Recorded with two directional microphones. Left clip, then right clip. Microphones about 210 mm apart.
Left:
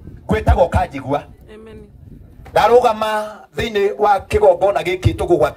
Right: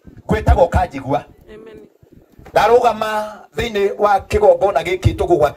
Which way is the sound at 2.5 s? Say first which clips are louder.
Even; 20° left (ahead or behind).